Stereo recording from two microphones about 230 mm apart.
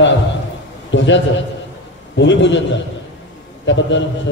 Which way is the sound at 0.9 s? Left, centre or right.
Left.